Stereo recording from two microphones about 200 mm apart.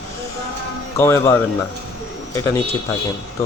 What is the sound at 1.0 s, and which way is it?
Speech, 10° left (ahead or behind).